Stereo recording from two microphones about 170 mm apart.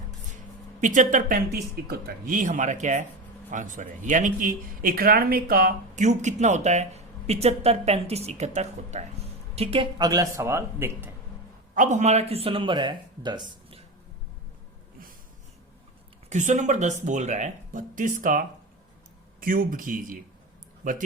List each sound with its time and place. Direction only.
0.8 s speech: 50° right (ahead or behind); by 11.1 s 15° right (ahead or behind)
11.7 s speech: 45° right (ahead or behind); by 13.8 s 30° right (ahead or behind)
16.3 s speech: 45° right (ahead or behind)